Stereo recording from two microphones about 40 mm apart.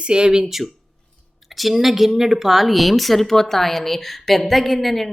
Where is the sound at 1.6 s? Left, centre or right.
Centre.